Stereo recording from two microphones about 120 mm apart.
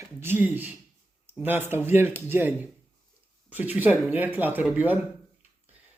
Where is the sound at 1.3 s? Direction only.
15° right (ahead or behind).